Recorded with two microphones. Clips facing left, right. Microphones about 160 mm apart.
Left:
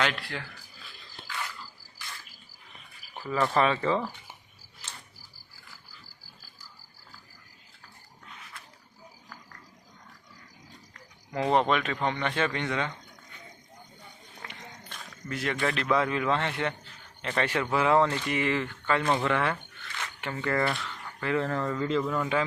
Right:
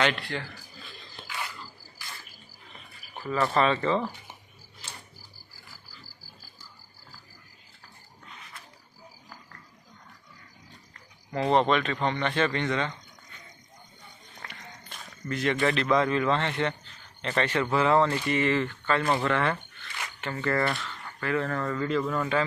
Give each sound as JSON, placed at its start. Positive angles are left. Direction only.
{"t": 0.0, "sound": "speech", "side_deg": 0}
{"t": 3.3, "sound": "a man's voice", "side_deg": 0}
{"t": 4.8, "sound": "cricket", "side_deg": 5}
{"t": 11.3, "sound": "a man's voice", "side_deg": 0}
{"t": 14.8, "sound": "a sound", "side_deg": -5}
{"t": 15.3, "sound": "a man's voice", "side_deg": 5}
{"t": 21.2, "sound": "speech", "side_deg": 20}
{"t": 22.0, "sound": "a man's voice", "side_deg": 5}